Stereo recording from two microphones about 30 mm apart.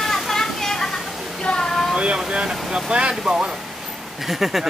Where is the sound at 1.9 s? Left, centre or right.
Right.